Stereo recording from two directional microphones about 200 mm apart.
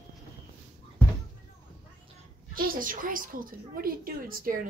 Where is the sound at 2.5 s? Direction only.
45° right (ahead or behind).